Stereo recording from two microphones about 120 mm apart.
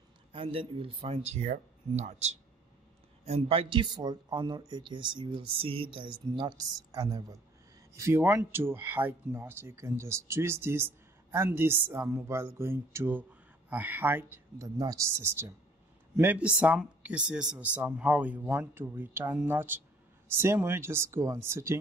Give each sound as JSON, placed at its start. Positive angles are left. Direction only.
{"t": 0.3, "sound": "speech", "side_deg": -50}
{"t": 3.3, "sound": "speech", "side_deg": -55}
{"t": 14.8, "sound": "speech", "side_deg": -30}
{"t": 15.1, "sound": "speech", "side_deg": -20}